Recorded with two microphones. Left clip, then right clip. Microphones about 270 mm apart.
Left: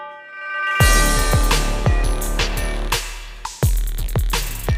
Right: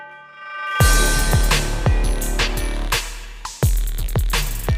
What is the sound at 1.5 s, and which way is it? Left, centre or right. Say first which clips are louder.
Music: even; centre.